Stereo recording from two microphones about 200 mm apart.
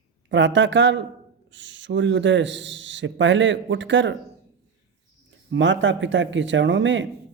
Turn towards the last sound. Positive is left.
turn(degrees=-65)  # may be behind; listen again after turning